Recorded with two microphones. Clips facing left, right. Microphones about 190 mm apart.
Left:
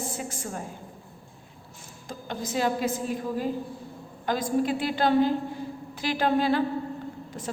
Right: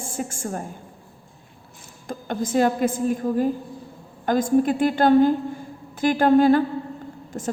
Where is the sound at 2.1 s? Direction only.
50° right (ahead or behind).